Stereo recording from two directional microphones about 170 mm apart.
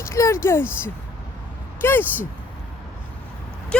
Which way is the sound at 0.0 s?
15° left (ahead or behind).